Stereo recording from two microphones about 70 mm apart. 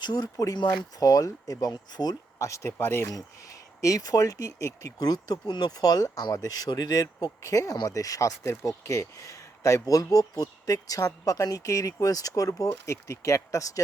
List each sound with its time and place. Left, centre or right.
0.0 s speech: left
2.4 s speech: left
3.8 s speech: left